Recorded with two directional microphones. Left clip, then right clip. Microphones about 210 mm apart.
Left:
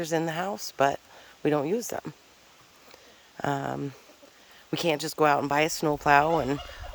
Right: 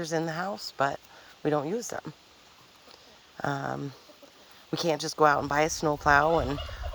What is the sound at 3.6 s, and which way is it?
Speech, 25° left (ahead or behind).